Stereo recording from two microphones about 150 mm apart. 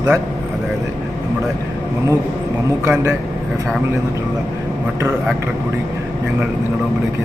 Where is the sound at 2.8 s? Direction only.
15° right (ahead or behind).